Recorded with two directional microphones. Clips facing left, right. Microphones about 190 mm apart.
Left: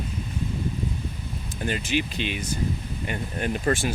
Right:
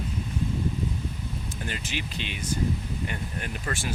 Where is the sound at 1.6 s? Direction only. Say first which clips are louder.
Left 10 dB; 15° left (ahead or behind).